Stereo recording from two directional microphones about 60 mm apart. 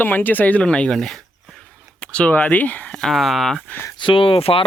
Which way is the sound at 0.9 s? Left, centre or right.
Centre.